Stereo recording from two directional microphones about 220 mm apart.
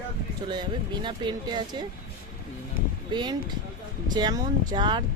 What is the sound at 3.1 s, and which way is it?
Speech, 20° right (ahead or behind).